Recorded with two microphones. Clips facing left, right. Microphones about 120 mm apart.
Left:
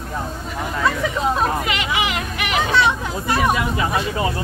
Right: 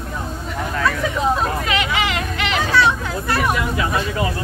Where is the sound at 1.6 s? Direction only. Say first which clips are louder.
Right 2 dB; 15° left (ahead or behind).